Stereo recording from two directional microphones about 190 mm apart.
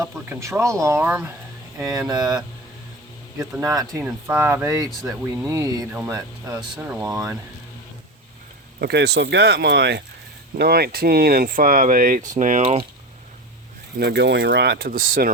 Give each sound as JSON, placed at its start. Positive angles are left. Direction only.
{"t": 0.0, "sound": "speech", "side_deg": -15}
{"t": 3.6, "sound": "speech", "side_deg": -20}
{"t": 6.8, "sound": "speech", "side_deg": -5}
{"t": 7.1, "sound": "speech", "side_deg": -20}
{"t": 8.8, "sound": "speech", "side_deg": -60}
{"t": 14.0, "sound": "speech", "side_deg": -60}